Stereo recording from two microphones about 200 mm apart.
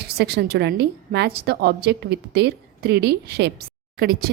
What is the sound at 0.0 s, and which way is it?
A woman's voice, 55° right (ahead or behind).